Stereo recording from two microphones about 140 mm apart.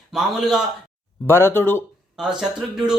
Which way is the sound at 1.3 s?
15° left (ahead or behind).